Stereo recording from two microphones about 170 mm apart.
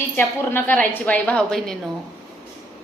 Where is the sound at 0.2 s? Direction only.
10° left (ahead or behind).